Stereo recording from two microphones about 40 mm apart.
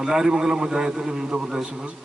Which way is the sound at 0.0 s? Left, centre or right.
Centre.